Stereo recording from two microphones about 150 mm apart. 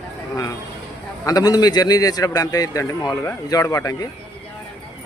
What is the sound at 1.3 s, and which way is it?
A man's voice, 25° left (ahead or behind).